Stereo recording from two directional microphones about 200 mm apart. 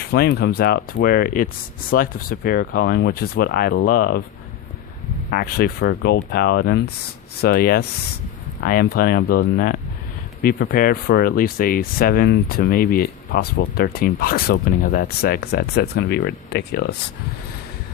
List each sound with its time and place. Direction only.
0.1 s speech: 55° left (ahead or behind)
5.3 s speech: 50° left (ahead or behind)